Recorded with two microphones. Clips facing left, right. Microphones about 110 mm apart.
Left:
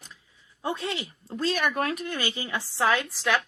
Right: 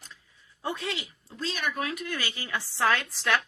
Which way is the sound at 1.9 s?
30° left (ahead or behind).